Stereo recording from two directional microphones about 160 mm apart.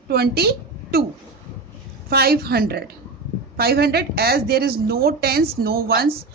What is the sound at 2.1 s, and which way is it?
A woman's voice, 75° right (ahead or behind).